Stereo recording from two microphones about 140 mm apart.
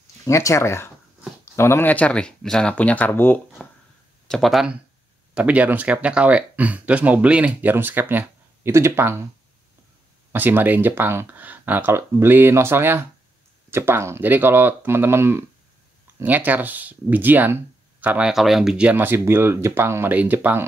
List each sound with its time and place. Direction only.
0.2 s speech: 20° left (ahead or behind)
4.3 s speech: centre (ahead or behind); by 9.2 s 15° right (ahead or behind)
10.3 s speech: 15° right (ahead or behind)